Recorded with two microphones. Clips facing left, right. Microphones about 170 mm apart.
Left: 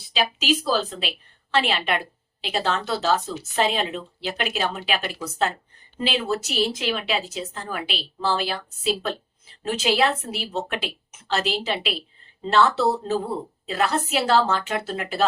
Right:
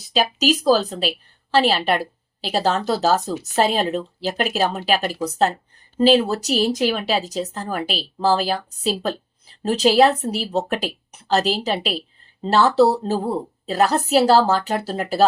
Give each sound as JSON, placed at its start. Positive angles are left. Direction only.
{"t": 0.1, "sound": "speech", "side_deg": -40}